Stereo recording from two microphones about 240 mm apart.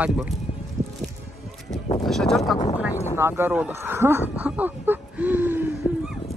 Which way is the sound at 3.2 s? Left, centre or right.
Centre.